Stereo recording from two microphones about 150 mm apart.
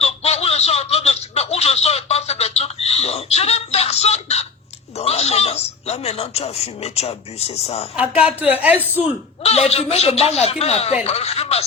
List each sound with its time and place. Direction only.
0.0 s a sound: 45° left (ahead or behind)
4.9 s speech: 45° left (ahead or behind)
7.9 s a woman's voice: 10° right (ahead or behind)
9.4 s speech: 45° left (ahead or behind)